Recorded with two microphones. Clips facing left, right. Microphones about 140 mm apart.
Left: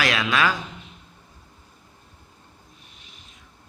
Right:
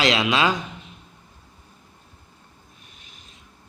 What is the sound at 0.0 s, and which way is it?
Speech, 25° right (ahead or behind).